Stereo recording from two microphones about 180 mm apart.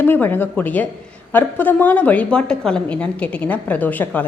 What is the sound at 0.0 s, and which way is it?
A woman's voice, 10° left (ahead or behind).